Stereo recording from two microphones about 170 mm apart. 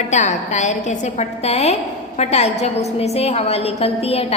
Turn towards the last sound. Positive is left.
turn(degrees=35)  # may be behind; listen again after turning